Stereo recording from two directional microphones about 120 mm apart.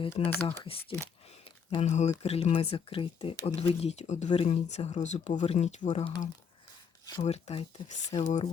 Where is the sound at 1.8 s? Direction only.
75° left (ahead or behind).